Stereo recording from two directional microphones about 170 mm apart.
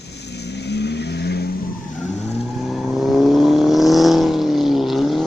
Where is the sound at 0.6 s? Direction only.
85° left.